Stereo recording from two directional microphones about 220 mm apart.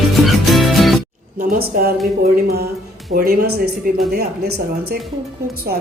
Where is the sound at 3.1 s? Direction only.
45° right (ahead or behind).